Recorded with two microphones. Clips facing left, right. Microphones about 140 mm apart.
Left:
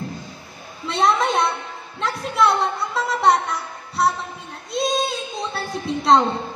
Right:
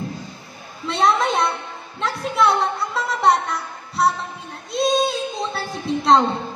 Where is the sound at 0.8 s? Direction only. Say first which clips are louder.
Even; centre (ahead or behind).